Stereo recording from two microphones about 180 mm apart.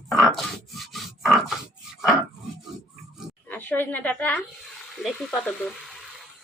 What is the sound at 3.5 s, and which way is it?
Speech, 10° left (ahead or behind).